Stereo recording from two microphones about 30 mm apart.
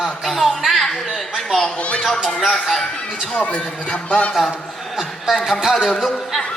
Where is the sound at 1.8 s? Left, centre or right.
Left.